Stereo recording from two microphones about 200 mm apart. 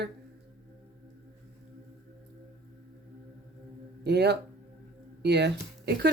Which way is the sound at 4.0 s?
55° right (ahead or behind).